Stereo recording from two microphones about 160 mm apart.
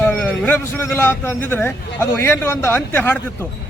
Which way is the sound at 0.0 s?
10° left (ahead or behind).